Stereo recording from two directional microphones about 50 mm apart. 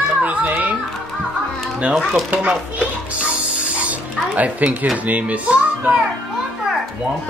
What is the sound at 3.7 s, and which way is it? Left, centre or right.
A child's voice, right.